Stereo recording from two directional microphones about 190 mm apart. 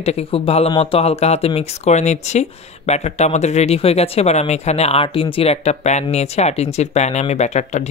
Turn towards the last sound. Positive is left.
turn(degrees=35)  # may be behind; listen again after turning